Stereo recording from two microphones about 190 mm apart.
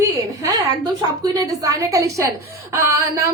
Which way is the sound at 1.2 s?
20° right (ahead or behind).